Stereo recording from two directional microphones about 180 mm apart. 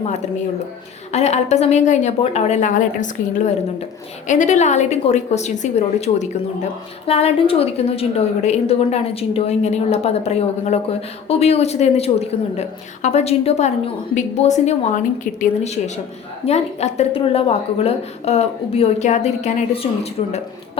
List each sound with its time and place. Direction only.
1.1 s a woman's voice: 35° left (ahead or behind)